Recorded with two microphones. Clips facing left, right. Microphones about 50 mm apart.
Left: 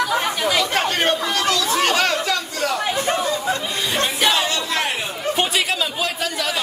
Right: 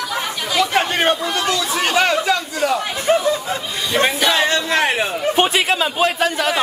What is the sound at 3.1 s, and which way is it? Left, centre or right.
Snicker, centre.